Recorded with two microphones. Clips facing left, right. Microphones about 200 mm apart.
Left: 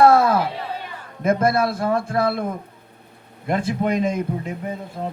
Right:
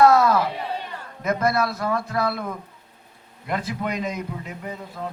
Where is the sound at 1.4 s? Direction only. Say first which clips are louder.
Left 3 dB; 30° left (ahead or behind).